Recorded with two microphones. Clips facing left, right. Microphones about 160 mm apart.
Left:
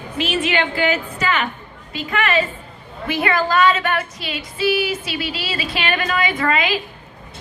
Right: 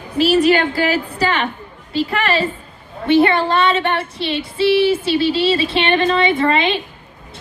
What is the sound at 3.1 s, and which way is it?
Female singing, 30° right (ahead or behind).